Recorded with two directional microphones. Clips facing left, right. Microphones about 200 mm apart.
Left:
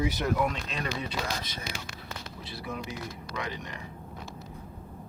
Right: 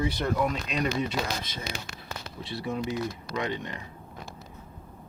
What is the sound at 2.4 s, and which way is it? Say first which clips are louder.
Speech: right 7 dB; 25° right (ahead or behind).